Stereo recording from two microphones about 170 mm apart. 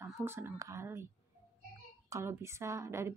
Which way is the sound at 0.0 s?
15° right (ahead or behind).